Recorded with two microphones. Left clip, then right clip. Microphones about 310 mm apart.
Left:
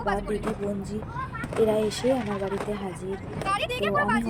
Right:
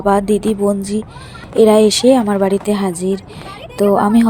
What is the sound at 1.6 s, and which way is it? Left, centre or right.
A woman's voice, right.